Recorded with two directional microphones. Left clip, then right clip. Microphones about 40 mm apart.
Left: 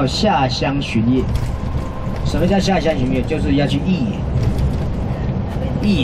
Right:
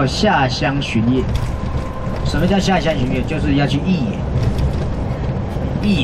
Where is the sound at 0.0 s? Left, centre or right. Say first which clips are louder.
Right 1 dB; centre.